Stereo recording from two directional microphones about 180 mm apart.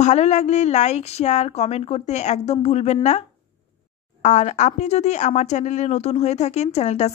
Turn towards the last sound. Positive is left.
turn(degrees=35)  # may be behind; listen again after turning